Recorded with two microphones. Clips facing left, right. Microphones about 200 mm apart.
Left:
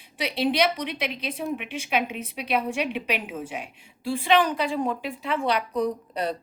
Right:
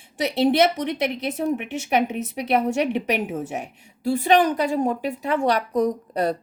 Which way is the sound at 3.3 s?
45° right (ahead or behind).